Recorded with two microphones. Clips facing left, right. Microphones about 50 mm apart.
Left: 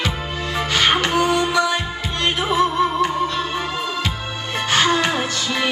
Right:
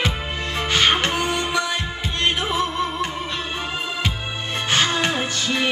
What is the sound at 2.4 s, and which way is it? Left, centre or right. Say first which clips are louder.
Music: left 5 dB; centre.